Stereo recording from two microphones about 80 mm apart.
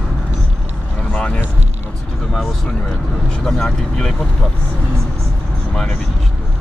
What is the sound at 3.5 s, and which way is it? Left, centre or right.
Vehicle, centre.